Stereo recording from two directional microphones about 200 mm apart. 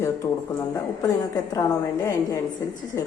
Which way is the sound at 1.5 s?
15° left (ahead or behind).